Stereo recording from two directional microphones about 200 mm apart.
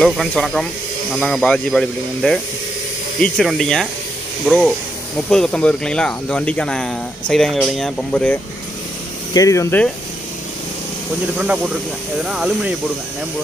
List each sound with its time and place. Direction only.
0.0 s speech: centre (ahead or behind)
9.3 s speech: 15° left (ahead or behind)
11.3 s speech: 5° right (ahead or behind)